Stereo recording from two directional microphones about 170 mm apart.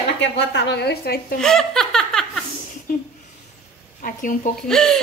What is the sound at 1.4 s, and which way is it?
Laughter, 5° left (ahead or behind).